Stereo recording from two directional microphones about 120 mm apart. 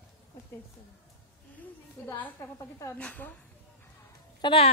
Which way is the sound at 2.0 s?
20° left (ahead or behind).